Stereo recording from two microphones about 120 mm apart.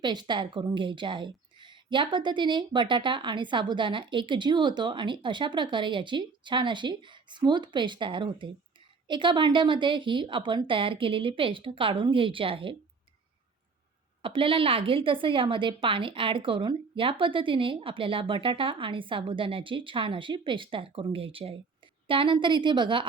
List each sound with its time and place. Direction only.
0.0 s a woman's voice: 40° right (ahead or behind)
14.2 s a woman's voice: 50° right (ahead or behind)